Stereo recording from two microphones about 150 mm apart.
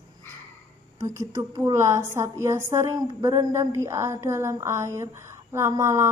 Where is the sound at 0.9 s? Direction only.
20° right (ahead or behind).